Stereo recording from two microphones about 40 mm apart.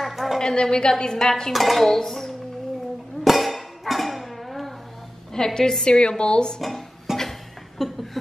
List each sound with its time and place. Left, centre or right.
0.0 s a sound: centre
0.4 s a woman's voice: centre
1.5 s dishes: centre
3.3 s music: centre
5.3 s a woman's voice: centre
6.6 s dishes: centre
7.8 s a sound: centre